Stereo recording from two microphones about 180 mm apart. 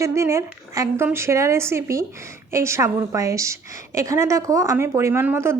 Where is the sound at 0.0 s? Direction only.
15° right (ahead or behind).